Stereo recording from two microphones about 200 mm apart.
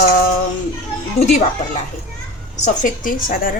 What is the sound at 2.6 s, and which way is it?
Speech, 40° left (ahead or behind).